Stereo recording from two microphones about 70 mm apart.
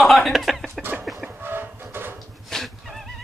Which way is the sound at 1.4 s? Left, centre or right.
Right.